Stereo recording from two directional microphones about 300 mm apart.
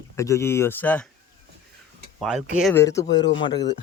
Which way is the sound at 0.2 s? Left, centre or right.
Centre.